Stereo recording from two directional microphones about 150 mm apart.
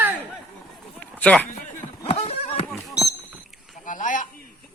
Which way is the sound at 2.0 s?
40° left (ahead or behind).